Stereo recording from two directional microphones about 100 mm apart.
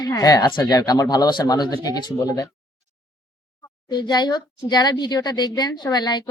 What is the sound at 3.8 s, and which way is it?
A woman's voice, 45° left (ahead or behind).